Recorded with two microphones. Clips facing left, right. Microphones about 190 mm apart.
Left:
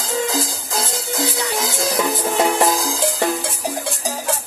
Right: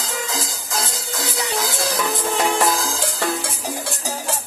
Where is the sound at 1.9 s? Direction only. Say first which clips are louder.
Left 5 dB; 25° left (ahead or behind).